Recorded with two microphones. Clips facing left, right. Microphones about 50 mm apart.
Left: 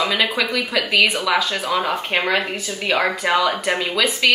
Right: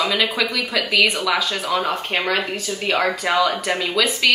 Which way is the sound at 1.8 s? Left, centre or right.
Left.